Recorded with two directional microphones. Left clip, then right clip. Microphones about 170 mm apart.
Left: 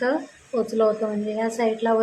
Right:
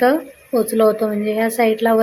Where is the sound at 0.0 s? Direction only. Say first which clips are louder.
Right 8 dB; 35° right (ahead or behind).